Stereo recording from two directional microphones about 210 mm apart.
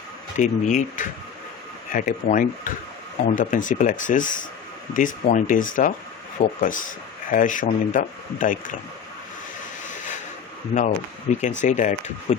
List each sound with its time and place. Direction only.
0.3 s speech: 35° left (ahead or behind)
10.8 s speech: 35° left (ahead or behind)